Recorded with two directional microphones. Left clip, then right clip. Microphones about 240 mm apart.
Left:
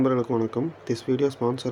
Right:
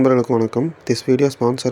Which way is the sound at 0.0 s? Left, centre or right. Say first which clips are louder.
Right 8 dB; centre.